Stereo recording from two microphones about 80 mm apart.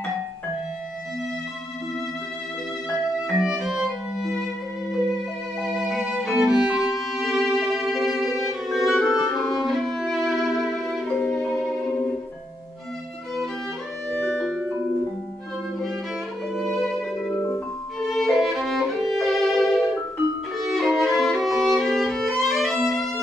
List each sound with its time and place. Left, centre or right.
2.9 s music: centre
5.6 s violin: centre
6.9 s music: centre
14.3 s music: centre
16.5 s music: centre
18.0 s violin: centre